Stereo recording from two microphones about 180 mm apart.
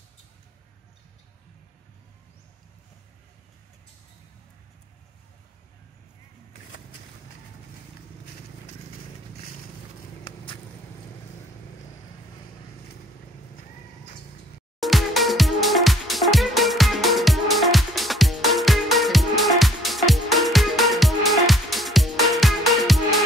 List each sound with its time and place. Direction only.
10.2 s vehicle: 30° left (ahead or behind)
14.8 s music: centre (ahead or behind)